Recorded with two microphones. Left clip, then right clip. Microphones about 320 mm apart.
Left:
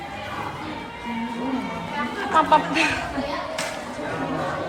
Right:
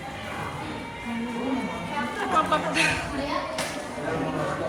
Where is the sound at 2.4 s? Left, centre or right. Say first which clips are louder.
Left 6 dB; left.